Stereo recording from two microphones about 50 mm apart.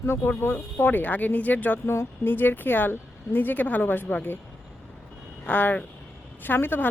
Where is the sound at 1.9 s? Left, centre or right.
Left.